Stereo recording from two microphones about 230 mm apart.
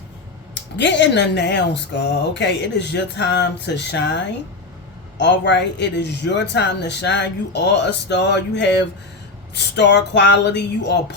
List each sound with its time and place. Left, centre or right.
0.8 s a man's voice: left